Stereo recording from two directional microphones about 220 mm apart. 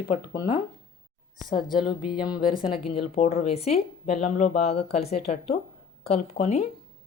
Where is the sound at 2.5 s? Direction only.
25° left (ahead or behind).